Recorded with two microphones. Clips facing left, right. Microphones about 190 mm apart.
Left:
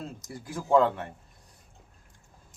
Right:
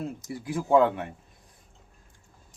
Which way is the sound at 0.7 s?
15° right (ahead or behind).